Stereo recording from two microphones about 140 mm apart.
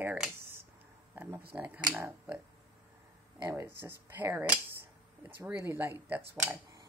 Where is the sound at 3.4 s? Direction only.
20° right (ahead or behind).